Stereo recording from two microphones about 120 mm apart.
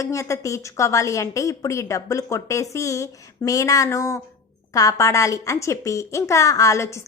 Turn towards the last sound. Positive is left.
turn(degrees=25)  # may be behind; listen again after turning